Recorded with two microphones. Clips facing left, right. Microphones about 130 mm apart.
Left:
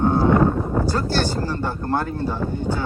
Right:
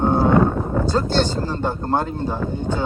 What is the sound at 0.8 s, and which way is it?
Speech, 20° right (ahead or behind).